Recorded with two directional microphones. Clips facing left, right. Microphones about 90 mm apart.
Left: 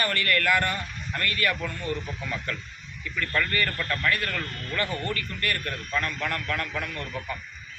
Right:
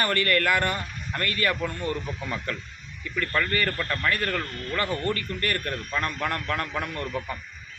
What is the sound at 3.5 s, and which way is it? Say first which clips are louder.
Speech: right 1 dB; 30° right (ahead or behind).